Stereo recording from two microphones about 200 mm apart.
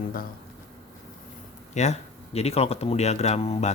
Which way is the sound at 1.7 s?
35° left (ahead or behind).